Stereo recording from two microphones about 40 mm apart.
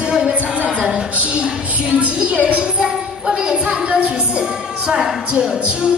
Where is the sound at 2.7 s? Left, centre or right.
Centre.